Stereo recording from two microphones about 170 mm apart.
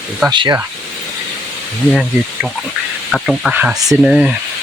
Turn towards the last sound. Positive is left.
turn(degrees=-5)  # may be behind; listen again after turning